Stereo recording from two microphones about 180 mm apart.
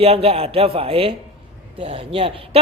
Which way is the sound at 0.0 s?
35° right (ahead or behind).